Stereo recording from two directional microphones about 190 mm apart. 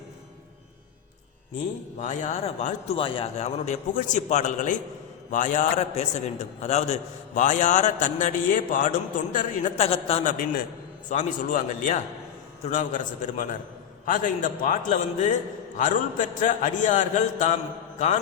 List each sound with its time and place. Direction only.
2.0 s a man's voice: 40° left (ahead or behind)